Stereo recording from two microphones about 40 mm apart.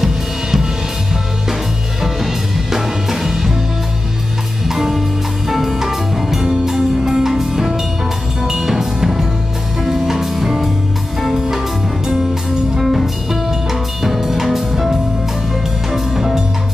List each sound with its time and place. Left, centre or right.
0.0 s drum kit: centre
2.7 s music: centre
4.6 s music: centre
12.8 s music: centre